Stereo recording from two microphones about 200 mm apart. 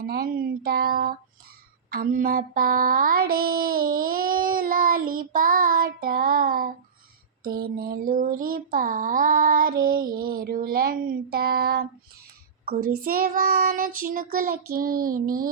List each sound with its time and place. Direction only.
0.0 s speech: 50° right (ahead or behind)
1.9 s child singing: 45° right (ahead or behind)